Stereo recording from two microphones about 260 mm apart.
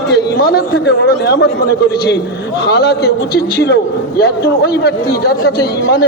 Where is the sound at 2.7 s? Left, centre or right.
Left.